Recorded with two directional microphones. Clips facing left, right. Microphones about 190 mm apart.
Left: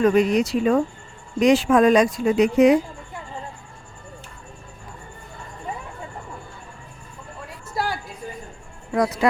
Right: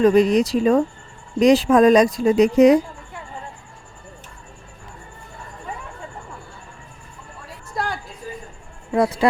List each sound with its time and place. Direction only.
0.0 s speech: 35° right (ahead or behind)
7.8 s a sound: 5° left (ahead or behind)
8.9 s speech: 30° right (ahead or behind)